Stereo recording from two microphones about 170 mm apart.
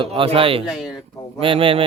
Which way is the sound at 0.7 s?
5° right (ahead or behind).